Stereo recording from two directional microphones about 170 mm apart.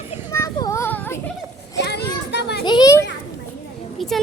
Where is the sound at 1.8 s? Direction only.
80° left.